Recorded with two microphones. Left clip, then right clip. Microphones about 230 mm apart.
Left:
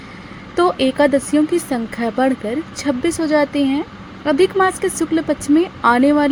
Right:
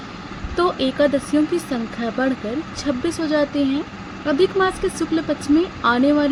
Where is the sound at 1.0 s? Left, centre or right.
Left.